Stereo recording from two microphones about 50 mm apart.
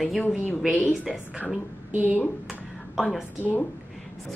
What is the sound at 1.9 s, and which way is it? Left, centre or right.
Speech, right.